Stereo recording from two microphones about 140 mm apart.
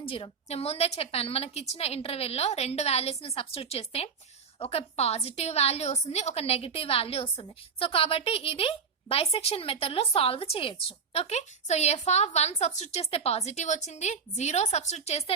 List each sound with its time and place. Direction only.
0.0 s a woman's voice: 40° left (ahead or behind)